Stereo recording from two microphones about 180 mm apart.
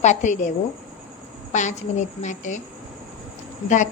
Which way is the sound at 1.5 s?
40° left (ahead or behind).